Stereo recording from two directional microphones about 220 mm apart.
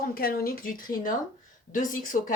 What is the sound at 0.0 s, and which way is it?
Speech, 45° left (ahead or behind).